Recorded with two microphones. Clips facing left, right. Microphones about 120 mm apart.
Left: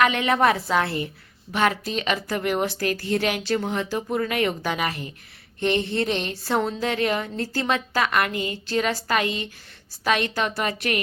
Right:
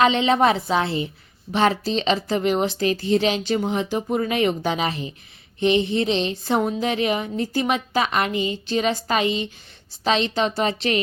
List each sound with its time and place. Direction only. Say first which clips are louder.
0.0 s a woman's voice: right 2 dB; 25° right (ahead or behind)